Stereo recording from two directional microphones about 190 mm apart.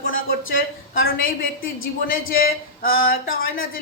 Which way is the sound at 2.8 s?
50° left (ahead or behind).